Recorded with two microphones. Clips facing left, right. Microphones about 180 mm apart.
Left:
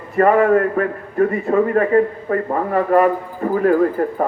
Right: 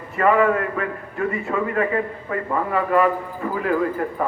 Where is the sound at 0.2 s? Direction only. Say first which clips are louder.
Left 5 dB; 40° left (ahead or behind).